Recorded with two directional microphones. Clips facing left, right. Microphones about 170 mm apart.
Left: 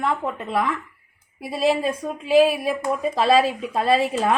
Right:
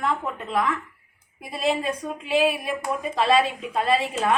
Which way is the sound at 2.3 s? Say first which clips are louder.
Left 6 dB; 35° left (ahead or behind).